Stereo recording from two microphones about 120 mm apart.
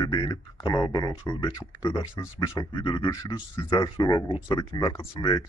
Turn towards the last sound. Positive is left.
turn(degrees=45)  # may be behind; listen again after turning